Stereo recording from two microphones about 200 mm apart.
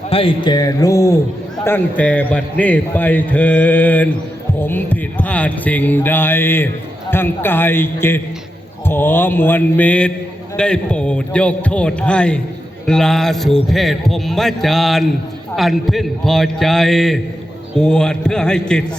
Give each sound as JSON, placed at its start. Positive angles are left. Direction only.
{"t": 0.1, "sound": "a man's voice", "side_deg": 25}